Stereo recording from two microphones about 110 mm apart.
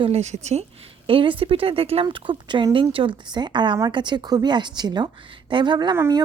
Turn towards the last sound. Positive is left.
turn(degrees=-30)  # may be behind; listen again after turning